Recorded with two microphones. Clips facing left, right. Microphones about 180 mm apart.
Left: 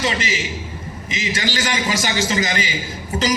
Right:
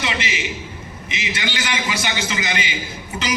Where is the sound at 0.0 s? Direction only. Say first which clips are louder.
Left 3 dB; 40° left (ahead or behind).